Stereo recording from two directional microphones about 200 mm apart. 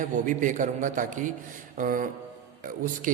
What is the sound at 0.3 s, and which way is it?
A man's voice, 40° right (ahead or behind).